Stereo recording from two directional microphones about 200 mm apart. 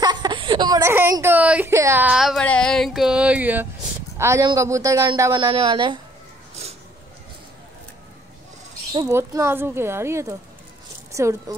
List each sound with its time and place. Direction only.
0.0 s a sound: 20° right (ahead or behind)
4.2 s speech: 15° right (ahead or behind)
8.9 s speech: 15° right (ahead or behind)